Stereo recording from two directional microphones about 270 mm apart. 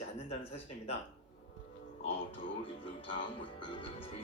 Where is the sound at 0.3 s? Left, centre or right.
Left.